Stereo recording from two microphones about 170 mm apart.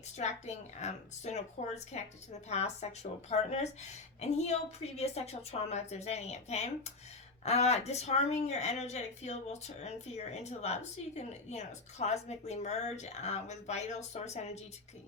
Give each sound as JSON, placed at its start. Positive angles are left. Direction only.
{"t": 0.2, "sound": "speech", "side_deg": 40}